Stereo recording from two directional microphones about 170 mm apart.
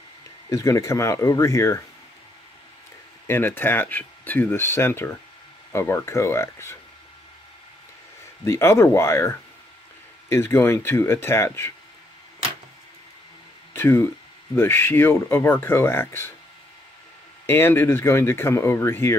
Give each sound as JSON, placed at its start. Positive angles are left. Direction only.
{"t": 0.5, "sound": "speech", "side_deg": 20}
{"t": 3.3, "sound": "speech", "side_deg": 15}
{"t": 8.5, "sound": "speech", "side_deg": 15}
{"t": 13.7, "sound": "speech", "side_deg": 15}
{"t": 17.5, "sound": "speech", "side_deg": 15}